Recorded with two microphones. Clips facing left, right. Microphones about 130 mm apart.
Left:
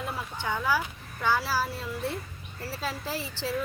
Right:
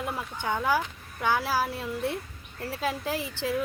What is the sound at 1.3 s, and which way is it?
Speech, 50° right (ahead or behind).